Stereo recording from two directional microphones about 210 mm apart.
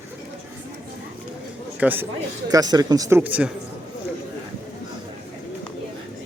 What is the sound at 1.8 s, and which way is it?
Speech, 10° right (ahead or behind).